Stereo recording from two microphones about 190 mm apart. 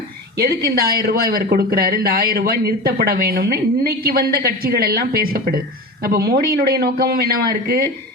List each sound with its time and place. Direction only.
0.3 s a man's voice: 55° right (ahead or behind)